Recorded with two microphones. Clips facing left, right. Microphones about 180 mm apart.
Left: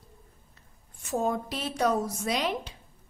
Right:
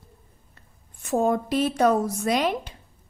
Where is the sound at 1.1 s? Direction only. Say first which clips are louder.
Right 7 dB; 55° right (ahead or behind).